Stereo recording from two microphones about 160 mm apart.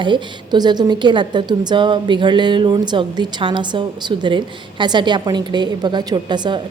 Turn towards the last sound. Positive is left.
turn(degrees=-30)  # may be behind; listen again after turning